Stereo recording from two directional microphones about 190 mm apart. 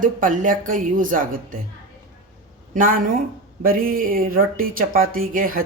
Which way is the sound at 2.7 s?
45° right (ahead or behind).